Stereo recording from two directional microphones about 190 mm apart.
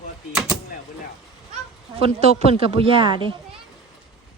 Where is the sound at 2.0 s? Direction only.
35° right (ahead or behind).